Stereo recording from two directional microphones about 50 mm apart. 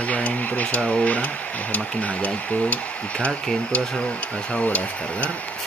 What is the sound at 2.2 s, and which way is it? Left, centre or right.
Speech, left.